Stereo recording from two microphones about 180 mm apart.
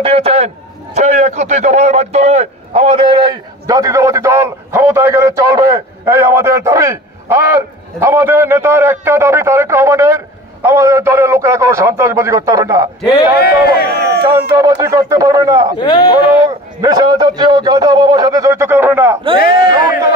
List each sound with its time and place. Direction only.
0.0 s a man's voice: 35° right (ahead or behind); by 12.9 s 15° right (ahead or behind)
13.3 s speech: 60° left (ahead or behind)
13.8 s speech: 65° right (ahead or behind)
14.6 s a man's voice: 20° right (ahead or behind)
15.8 s speech: 25° left (ahead or behind)
16.4 s a man's voice: 20° right (ahead or behind)
19.7 s a man's voice: 25° right (ahead or behind)